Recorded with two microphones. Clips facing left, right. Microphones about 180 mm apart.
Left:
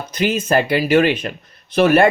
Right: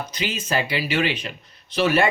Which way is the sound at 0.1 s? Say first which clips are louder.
Left 11 dB; 50° left (ahead or behind).